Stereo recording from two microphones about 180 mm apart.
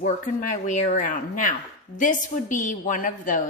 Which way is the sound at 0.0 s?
45° left (ahead or behind).